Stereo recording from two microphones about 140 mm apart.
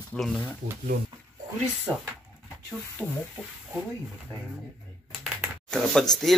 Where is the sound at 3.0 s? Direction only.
20° left (ahead or behind).